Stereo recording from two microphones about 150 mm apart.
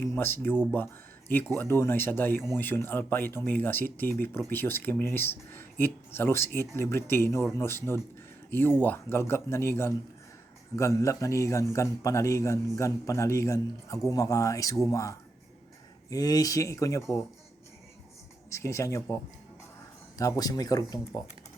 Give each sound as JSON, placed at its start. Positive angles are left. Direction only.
{"t": 0.0, "sound": "a man's voice", "side_deg": 15}
{"t": 18.5, "sound": "a man's voice", "side_deg": 20}
{"t": 20.1, "sound": "a man's voice", "side_deg": 25}